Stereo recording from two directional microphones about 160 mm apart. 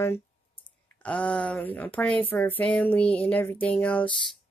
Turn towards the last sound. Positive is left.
turn(degrees=10)  # may be behind; listen again after turning